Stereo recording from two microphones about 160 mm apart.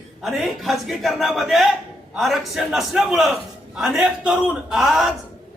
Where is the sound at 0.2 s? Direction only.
Centre (ahead or behind).